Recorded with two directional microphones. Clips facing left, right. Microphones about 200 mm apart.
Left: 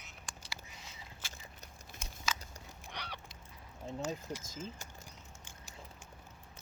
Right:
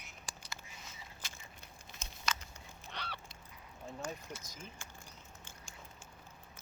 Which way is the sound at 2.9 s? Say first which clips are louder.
Even; 15° left (ahead or behind).